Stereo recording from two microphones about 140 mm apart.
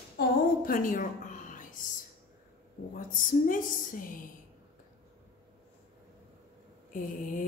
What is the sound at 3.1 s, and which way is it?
Speech, 75° left (ahead or behind).